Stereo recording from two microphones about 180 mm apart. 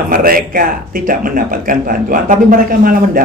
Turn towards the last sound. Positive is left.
turn(degrees=-50)  # may be behind; listen again after turning